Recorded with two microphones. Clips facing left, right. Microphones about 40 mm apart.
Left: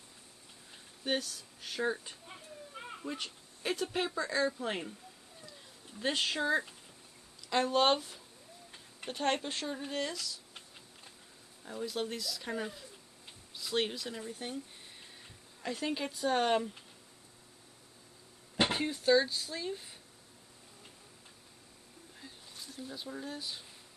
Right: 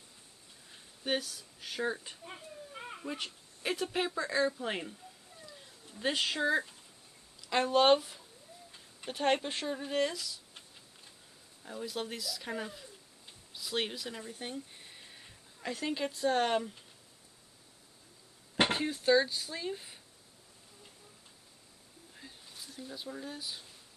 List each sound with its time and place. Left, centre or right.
1.0 s speech: centre
2.3 s a sound: centre
3.0 s speech: centre
5.9 s speech: centre
11.6 s speech: centre
15.7 s speech: centre
18.9 s speech: centre
22.8 s speech: centre